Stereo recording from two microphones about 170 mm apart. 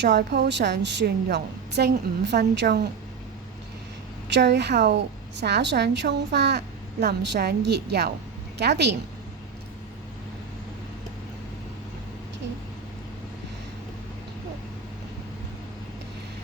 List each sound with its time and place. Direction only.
0.0 s a woman's voice: 90° right
4.3 s a woman's voice: 90° right